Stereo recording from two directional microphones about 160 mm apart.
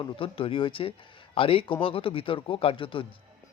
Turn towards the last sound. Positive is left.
turn(degrees=30)  # may be behind; listen again after turning